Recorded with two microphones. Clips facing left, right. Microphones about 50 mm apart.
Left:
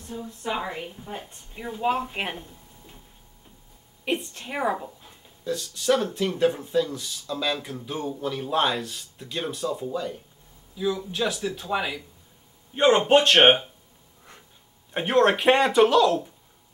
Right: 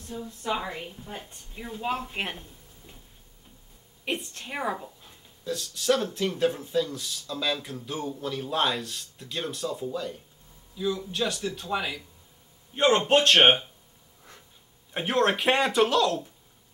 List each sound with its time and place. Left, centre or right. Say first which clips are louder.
0.0 s a woman's voice: left 1 dB; centre
4.0 s speech: left 4 dB; centre
14.9 s speech: left 4 dB; centre